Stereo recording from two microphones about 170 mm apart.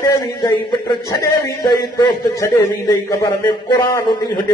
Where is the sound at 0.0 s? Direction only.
25° left (ahead or behind).